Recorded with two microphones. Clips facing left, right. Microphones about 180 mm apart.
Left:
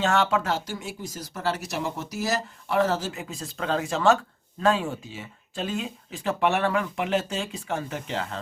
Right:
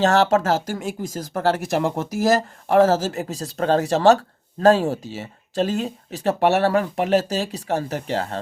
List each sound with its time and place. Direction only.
0.0 s speech: 40° right (ahead or behind)